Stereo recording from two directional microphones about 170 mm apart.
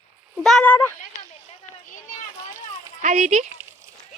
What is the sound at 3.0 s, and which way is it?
Speech, 45° right (ahead or behind).